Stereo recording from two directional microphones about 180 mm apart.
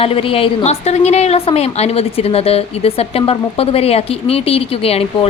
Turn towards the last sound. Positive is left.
turn(degrees=30)  # may be behind; listen again after turning